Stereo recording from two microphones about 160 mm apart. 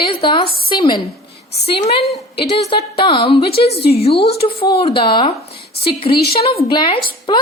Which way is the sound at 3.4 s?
80° left.